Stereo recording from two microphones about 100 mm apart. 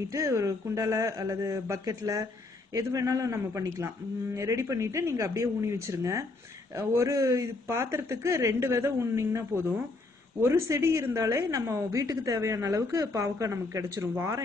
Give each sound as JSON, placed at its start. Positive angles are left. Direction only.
{"t": 0.1, "sound": "a woman's voice", "side_deg": -35}